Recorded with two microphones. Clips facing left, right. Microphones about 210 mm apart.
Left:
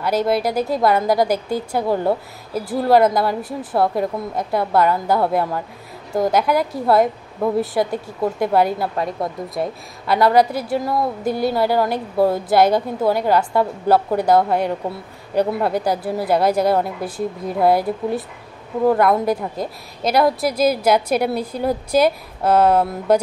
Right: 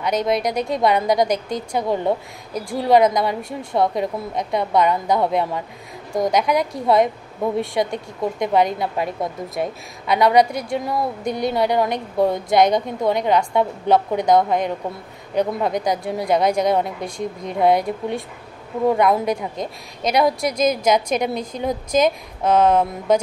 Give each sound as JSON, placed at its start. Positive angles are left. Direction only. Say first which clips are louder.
{"t": 0.0, "sound": "a woman's voice", "louder": "left 2 dB", "side_deg": 5}